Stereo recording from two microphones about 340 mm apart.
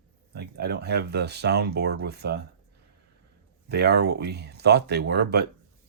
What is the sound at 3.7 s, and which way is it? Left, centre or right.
Speech, right.